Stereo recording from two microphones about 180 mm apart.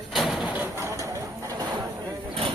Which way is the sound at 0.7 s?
15° right (ahead or behind).